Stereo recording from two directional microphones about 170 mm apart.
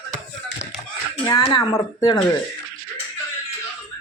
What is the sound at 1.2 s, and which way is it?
Speech, 20° left (ahead or behind).